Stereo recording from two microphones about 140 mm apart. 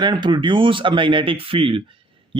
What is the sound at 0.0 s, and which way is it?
A man's voice, 35° right (ahead or behind).